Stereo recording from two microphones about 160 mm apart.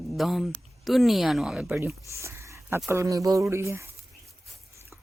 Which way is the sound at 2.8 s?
20° right (ahead or behind).